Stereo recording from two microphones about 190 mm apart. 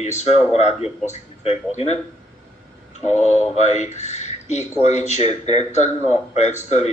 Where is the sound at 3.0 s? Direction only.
35° left (ahead or behind).